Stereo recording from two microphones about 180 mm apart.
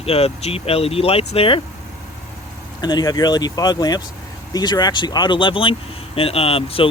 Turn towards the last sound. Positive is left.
turn(degrees=30)  # may be behind; listen again after turning